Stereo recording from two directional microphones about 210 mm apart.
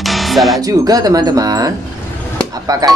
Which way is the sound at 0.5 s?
15° right (ahead or behind).